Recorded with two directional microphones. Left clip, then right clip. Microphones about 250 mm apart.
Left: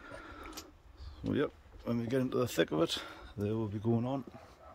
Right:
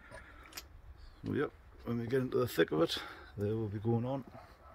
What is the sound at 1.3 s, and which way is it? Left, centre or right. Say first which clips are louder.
Speech: left 2 dB; centre.